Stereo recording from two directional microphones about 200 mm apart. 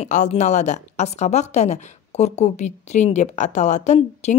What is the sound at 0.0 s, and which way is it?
Speech, 35° left (ahead or behind).